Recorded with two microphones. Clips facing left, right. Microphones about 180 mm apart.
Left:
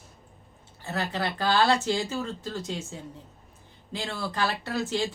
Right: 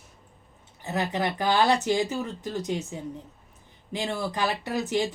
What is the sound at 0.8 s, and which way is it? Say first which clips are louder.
Speech: right 3 dB; 20° right (ahead or behind).